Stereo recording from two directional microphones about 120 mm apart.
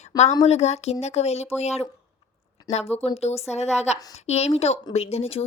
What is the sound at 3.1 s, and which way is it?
A woman's voice, 60° left (ahead or behind).